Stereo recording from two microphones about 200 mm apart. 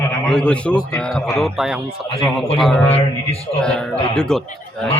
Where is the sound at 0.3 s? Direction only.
5° left (ahead or behind).